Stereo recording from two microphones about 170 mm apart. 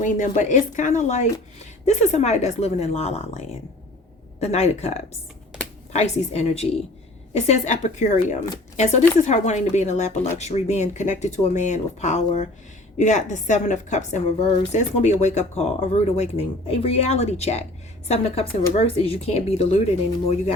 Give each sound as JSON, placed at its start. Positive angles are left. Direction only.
{"t": 0.0, "sound": "a woman's voice", "side_deg": 45}